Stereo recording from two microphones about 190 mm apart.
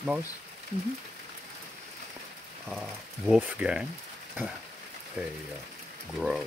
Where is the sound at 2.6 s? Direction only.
Centre (ahead or behind).